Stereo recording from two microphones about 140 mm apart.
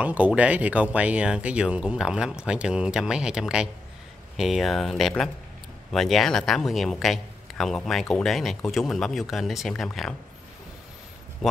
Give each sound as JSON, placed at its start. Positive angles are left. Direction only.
{"t": 0.0, "sound": "speech", "side_deg": -10}